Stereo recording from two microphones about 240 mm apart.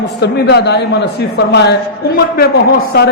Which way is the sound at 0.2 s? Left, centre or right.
Left.